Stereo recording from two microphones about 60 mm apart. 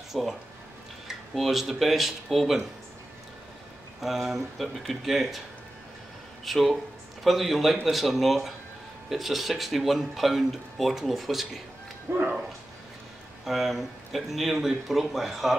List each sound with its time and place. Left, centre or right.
0.1 s speech: centre
4.0 s speech: centre
6.4 s speech: centre
12.1 s dog: right
13.5 s speech: centre